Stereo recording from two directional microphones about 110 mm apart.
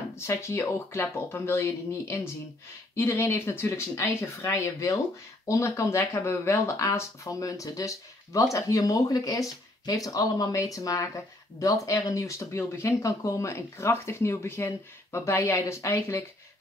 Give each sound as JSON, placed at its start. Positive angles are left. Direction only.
{"t": 0.3, "sound": "speech", "side_deg": 25}